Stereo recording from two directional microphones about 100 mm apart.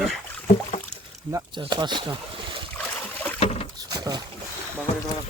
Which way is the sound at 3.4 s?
80° left.